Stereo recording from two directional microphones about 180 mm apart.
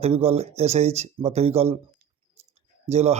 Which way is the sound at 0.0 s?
35° right (ahead or behind).